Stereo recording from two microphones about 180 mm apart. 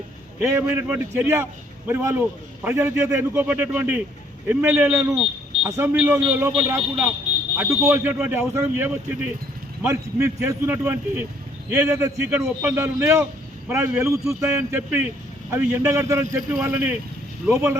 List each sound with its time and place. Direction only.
0.5 s speech: 10° right (ahead or behind)